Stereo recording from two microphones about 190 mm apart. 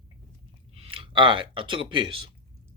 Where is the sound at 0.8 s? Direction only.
30° right (ahead or behind).